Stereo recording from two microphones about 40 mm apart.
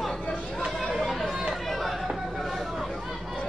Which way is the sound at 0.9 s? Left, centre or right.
Centre.